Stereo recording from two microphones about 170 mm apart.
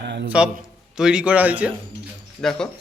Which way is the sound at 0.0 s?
90° right.